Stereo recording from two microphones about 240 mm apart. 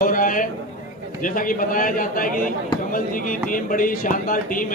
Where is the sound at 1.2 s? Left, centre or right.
Left.